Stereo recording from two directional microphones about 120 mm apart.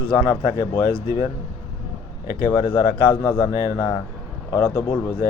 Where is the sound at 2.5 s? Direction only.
35° left (ahead or behind).